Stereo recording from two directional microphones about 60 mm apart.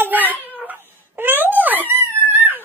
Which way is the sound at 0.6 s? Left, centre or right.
Right.